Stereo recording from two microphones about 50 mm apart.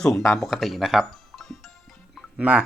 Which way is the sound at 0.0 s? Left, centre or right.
Centre.